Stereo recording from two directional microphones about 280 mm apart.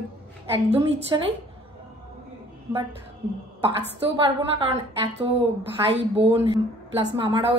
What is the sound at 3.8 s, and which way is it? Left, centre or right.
A woman's voice, centre.